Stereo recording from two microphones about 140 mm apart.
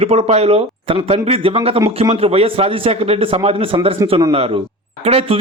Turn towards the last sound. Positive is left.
turn(degrees=-45)  # may be behind; listen again after turning